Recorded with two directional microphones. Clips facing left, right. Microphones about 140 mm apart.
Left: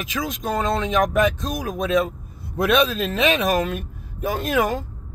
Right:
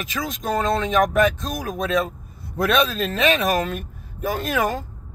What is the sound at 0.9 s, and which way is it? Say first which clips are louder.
Speech: right 1 dB; centre (ahead or behind).